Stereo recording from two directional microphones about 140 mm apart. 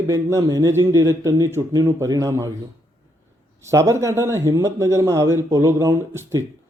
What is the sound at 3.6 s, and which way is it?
A man's voice, 20° right (ahead or behind).